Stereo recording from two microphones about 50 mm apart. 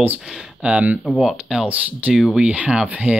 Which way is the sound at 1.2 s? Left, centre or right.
Centre.